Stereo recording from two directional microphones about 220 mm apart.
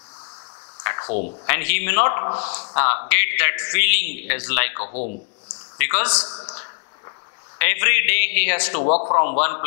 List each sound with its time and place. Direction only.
0.8 s a sound: 20° left (ahead or behind)
1.4 s a man's voice: 15° left (ahead or behind)
2.7 s a man's voice: 15° left (ahead or behind)
4.8 s speech: 35° left (ahead or behind)
5.8 s a man's voice: 15° left (ahead or behind)
6.1 s a man's voice: 25° left (ahead or behind)
7.5 s a man's voice: 15° left (ahead or behind)
8.8 s speech: 35° left (ahead or behind)
9.4 s a man's voice: 15° left (ahead or behind)